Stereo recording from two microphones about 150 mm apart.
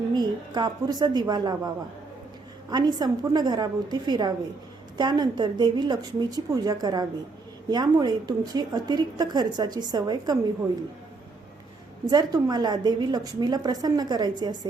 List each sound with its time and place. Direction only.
0.1 s a woman's voice: 30° right (ahead or behind)
12.0 s a woman's voice: 25° right (ahead or behind)